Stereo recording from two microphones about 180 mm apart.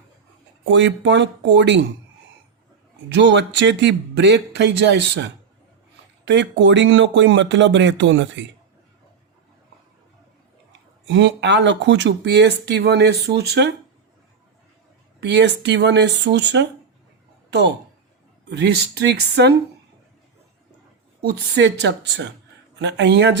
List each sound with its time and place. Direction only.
0.6 s speech: 90° right
3.1 s speech: 75° right (ahead or behind); by 8.4 s 90° right
10.7 s speech: 90° right; by 13.7 s 65° right (ahead or behind)
15.2 s speech: 75° right (ahead or behind)
18.4 s speech: 70° right (ahead or behind)
21.5 s speech: 70° right (ahead or behind)